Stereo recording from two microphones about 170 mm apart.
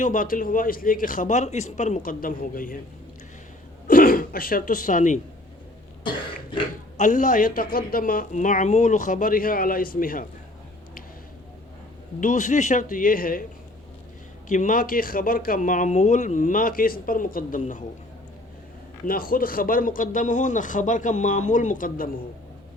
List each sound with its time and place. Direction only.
0.0 s speech: 50° left (ahead or behind)
3.8 s speech: 55° left (ahead or behind)
6.9 s speech: 50° left (ahead or behind)
12.2 s speech: 45° left (ahead or behind)
14.4 s speech: 50° left (ahead or behind)
19.0 s speech: 60° left (ahead or behind)